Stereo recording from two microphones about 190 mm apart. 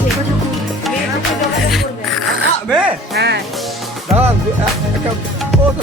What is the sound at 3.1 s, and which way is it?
Speech, 60° right (ahead or behind).